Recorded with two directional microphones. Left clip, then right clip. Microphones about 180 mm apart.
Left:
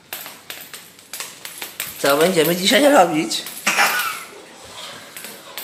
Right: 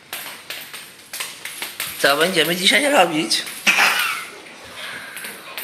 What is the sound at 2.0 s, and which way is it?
Speech, 15° left (ahead or behind).